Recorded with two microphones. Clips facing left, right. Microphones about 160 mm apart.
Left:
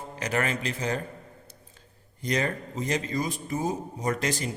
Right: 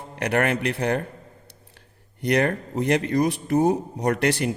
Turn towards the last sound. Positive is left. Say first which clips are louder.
# right 6 dB
turn(degrees=-65)  # may be behind; listen again after turning